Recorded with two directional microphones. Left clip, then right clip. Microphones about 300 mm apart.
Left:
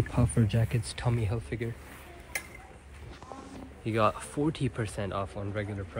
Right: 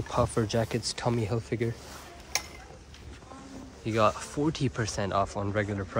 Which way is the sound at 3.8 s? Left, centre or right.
Centre.